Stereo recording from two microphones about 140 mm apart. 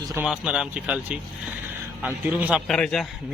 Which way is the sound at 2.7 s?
5° left (ahead or behind).